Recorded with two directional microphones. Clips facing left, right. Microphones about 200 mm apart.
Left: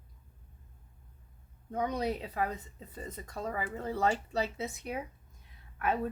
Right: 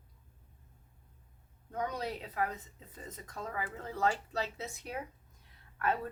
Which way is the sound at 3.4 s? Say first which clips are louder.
Left 4 dB; 30° left (ahead or behind).